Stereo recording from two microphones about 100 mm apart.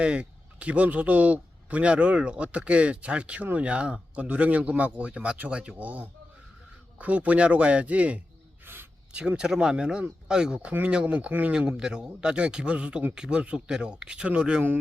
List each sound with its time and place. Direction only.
0.0 s a man's voice: 10° right (ahead or behind)
8.6 s a sound: 20° right (ahead or behind)
9.1 s a man's voice: 10° right (ahead or behind)